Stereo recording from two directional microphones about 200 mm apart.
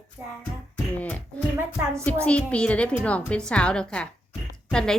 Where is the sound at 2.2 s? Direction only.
5° left (ahead or behind).